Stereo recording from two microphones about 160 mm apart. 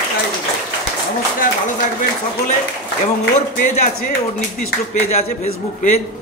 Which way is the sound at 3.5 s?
50° left (ahead or behind).